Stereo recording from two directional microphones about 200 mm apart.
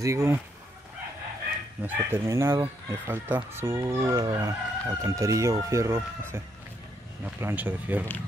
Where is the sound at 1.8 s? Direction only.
10° right (ahead or behind).